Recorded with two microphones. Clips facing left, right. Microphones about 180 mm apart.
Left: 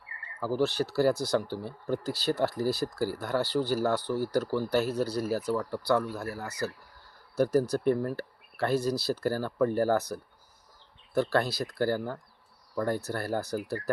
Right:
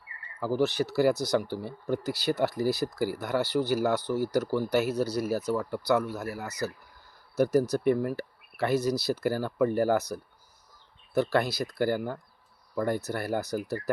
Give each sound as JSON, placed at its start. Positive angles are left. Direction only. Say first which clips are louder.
{"t": 0.3, "sound": "speech", "louder": "right 1 dB", "side_deg": -15}